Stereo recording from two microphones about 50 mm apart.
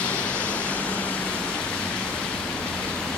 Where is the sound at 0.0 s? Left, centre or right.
Left.